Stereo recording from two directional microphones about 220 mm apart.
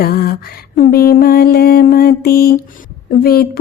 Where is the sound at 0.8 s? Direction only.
40° left (ahead or behind).